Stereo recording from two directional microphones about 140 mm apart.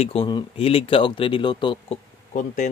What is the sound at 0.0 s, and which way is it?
A man's voice, 45° left (ahead or behind).